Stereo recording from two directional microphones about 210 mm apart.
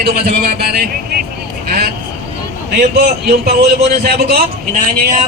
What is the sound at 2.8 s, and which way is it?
A man's voice, 45° right (ahead or behind).